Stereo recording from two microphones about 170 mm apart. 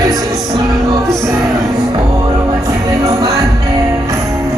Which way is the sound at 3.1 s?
20° right (ahead or behind).